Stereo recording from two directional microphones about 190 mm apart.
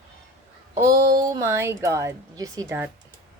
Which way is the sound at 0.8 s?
15° right (ahead or behind).